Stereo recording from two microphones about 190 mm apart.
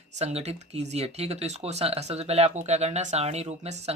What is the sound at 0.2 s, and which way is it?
Speech, 35° right (ahead or behind).